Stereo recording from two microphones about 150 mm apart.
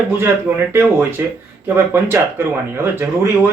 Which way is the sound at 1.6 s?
15° right (ahead or behind).